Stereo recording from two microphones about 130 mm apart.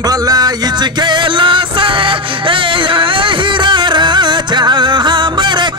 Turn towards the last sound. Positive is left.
turn(degrees=-35)  # may be behind; listen again after turning